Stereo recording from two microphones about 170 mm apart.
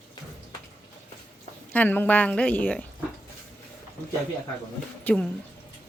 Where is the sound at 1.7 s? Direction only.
10° left (ahead or behind).